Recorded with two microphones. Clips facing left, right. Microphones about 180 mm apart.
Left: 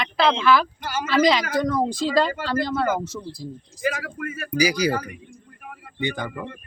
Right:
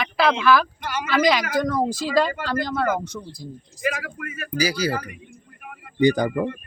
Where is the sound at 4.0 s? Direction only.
30° left (ahead or behind).